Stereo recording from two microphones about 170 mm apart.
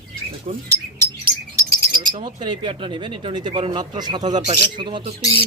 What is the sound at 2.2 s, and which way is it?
Speech, 30° right (ahead or behind).